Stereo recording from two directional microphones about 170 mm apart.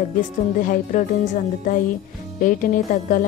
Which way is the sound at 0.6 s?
45° left (ahead or behind).